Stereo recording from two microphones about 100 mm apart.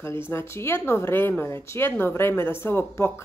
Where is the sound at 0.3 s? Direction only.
25° left (ahead or behind).